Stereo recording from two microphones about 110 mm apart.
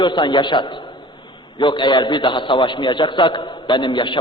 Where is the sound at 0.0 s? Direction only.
45° left (ahead or behind).